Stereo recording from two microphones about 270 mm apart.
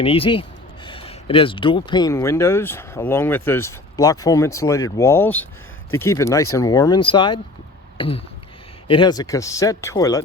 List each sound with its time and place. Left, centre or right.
0.0 s speech: left
7.9 s a sound: centre
8.9 s speech: centre